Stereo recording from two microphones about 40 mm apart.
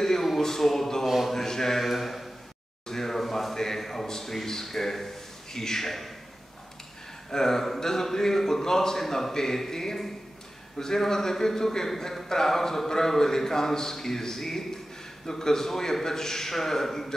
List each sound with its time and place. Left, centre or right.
0.0 s a sound: centre
0.4 s speech: centre
1.0 s speech: centre
1.3 s speech: centre
2.9 s a sound: centre
7.2 s speech: centre